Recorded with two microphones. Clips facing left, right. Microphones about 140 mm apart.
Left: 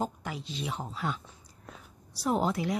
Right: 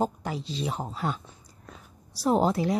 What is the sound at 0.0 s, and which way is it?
Speech, 35° right (ahead or behind).